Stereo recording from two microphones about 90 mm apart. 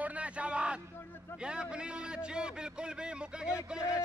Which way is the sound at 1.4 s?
10° right (ahead or behind).